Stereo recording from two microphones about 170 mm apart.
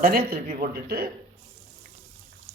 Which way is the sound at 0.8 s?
65° right (ahead or behind).